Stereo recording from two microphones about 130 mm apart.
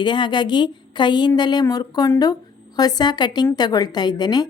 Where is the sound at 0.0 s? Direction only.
35° left (ahead or behind).